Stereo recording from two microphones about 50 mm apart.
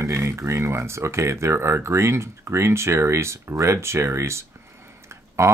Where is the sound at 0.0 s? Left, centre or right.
Right.